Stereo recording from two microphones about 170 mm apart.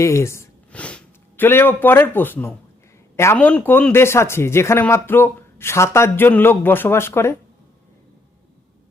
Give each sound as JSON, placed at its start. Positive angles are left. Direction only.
{"t": 0.0, "sound": "speech", "side_deg": 15}